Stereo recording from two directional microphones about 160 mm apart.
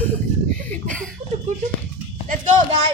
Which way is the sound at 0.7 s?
5° left (ahead or behind).